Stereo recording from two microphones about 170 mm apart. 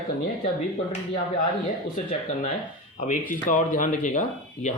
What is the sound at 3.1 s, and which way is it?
Speech, 50° left (ahead or behind).